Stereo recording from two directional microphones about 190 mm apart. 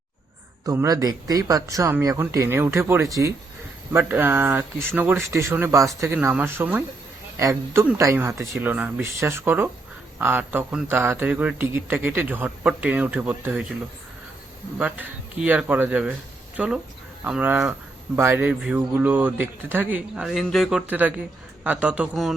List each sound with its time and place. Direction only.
0.6 s a man's voice: 20° right (ahead or behind)
14.8 s a man's voice: 5° right (ahead or behind)